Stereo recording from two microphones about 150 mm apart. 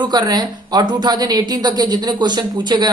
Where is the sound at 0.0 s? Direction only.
30° right (ahead or behind).